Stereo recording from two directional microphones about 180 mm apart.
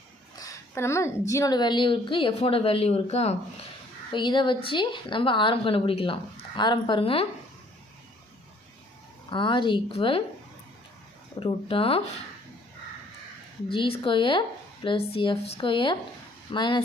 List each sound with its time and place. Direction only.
0.3 s a sound: 20° left (ahead or behind)
1.3 s a woman's voice: 20° left (ahead or behind); by 3.3 s 35° left (ahead or behind)
4.1 s a woman's voice: 25° left (ahead or behind)
9.3 s a woman's voice: 25° left (ahead or behind)
11.3 s speech: 30° left (ahead or behind)
13.7 s a woman's voice: 30° left (ahead or behind)